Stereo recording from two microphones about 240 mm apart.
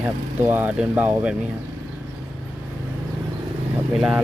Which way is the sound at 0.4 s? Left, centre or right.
Centre.